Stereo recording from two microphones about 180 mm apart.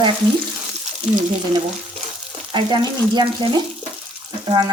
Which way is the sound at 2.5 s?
25° right (ahead or behind).